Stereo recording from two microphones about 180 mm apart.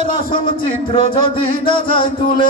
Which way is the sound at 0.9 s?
30° left (ahead or behind).